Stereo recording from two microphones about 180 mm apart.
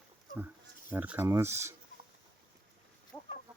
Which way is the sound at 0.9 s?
10° right (ahead or behind).